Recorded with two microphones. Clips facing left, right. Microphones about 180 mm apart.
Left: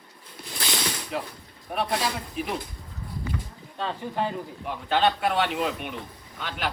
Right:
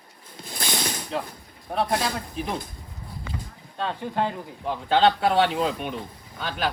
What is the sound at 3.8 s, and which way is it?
Speech, 20° right (ahead or behind).